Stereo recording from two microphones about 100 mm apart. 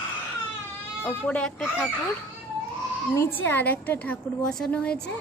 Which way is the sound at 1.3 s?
5° left (ahead or behind).